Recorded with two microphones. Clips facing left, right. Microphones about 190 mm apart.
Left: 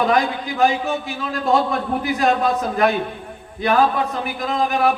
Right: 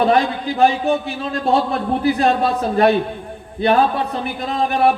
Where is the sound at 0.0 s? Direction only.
30° right (ahead or behind).